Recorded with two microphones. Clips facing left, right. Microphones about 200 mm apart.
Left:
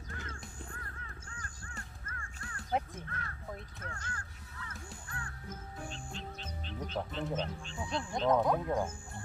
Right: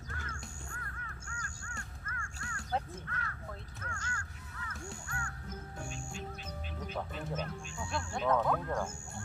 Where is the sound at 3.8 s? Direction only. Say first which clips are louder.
Right 1 dB; 35° left (ahead or behind).